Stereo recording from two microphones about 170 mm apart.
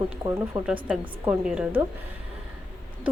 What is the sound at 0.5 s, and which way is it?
Speech, 20° right (ahead or behind).